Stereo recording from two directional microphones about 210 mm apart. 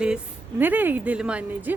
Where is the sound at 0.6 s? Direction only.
10° right (ahead or behind).